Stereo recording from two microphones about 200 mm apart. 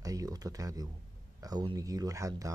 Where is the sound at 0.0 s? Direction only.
15° right (ahead or behind).